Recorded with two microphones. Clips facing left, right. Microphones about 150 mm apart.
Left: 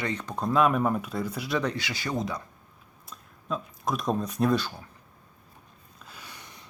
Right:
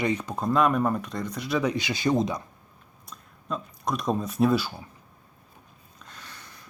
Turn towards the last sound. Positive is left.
turn(degrees=15)  # may be behind; listen again after turning